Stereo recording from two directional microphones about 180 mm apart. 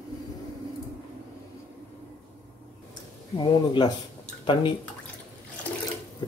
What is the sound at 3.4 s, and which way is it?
Speech, 25° left (ahead or behind).